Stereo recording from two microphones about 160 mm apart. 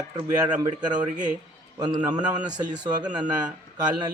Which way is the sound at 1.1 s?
50° right (ahead or behind).